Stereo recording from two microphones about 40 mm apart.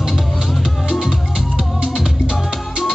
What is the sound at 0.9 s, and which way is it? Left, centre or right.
Music, centre.